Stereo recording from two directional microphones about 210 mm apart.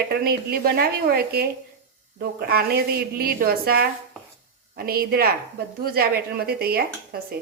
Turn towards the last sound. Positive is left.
turn(degrees=-45)  # may be behind; listen again after turning